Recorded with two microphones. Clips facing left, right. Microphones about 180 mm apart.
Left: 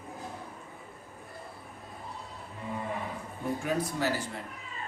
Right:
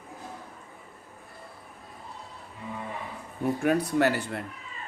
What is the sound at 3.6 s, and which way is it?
Speech, 65° right (ahead or behind).